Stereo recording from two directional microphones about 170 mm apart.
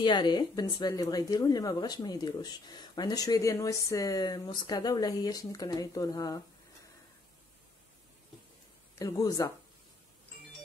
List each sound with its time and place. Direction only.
0.0 s speech: 25° left (ahead or behind)
8.9 s speech: 20° left (ahead or behind)